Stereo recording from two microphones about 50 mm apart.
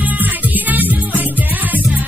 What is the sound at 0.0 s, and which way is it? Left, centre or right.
Music, right.